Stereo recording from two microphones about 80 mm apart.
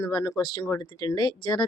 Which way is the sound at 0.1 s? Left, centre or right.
Left.